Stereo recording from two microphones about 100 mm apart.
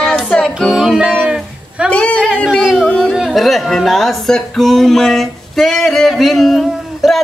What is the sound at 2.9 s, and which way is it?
Speech, 5° right (ahead or behind).